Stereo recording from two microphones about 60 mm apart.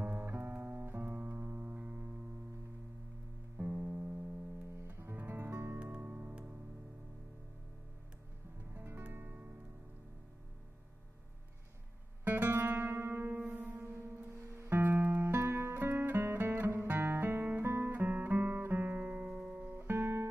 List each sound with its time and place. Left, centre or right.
0.0 s music: right
3.5 s music: right
5.1 s music: right
5.8 s music: right
8.7 s music: right
12.3 s music: right
13.7 s music: right
17.0 s guitar: right
19.7 s music: right